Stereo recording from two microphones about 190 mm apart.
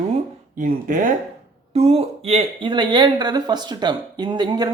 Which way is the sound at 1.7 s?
35° right (ahead or behind).